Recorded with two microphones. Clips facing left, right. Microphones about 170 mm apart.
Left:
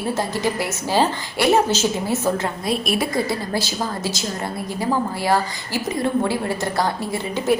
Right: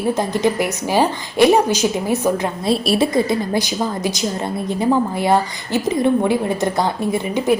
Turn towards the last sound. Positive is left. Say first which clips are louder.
# right 4 dB
turn(degrees=-20)  # may be behind; listen again after turning